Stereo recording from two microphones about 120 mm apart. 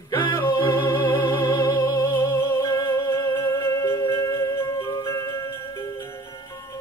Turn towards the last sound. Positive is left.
turn(degrees=25)  # may be behind; listen again after turning